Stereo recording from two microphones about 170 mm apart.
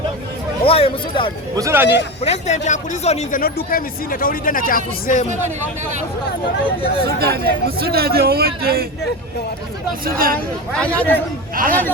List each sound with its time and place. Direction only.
0.6 s speech: 35° left (ahead or behind)
1.5 s speech: 15° right (ahead or behind)
2.2 s speech: 40° left (ahead or behind)
3.4 s speech: 55° left (ahead or behind)
7.0 s speech: 65° right (ahead or behind)
10.0 s speech: 60° right (ahead or behind)
10.8 s a man's voice: 5° left (ahead or behind)
11.5 s speech: 55° right (ahead or behind)